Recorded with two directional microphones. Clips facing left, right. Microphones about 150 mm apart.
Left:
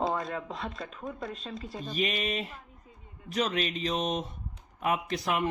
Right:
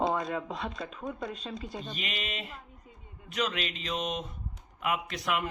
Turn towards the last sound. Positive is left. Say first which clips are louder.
# left 3 dB
turn(degrees=30)  # may be behind; listen again after turning